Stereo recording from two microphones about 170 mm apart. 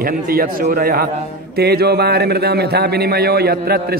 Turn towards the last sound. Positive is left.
turn(degrees=-65)  # may be behind; listen again after turning